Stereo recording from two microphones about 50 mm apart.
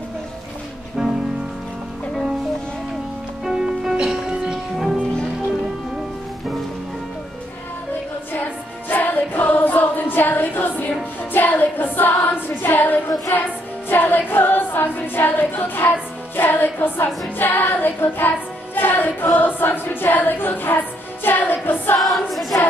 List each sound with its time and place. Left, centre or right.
1.0 s music: centre
3.4 s music: centre
8.3 s music: left
12.3 s a sound: left
13.3 s music: left
17.4 s child singing: left
18.8 s choir: left
22.0 s choir: centre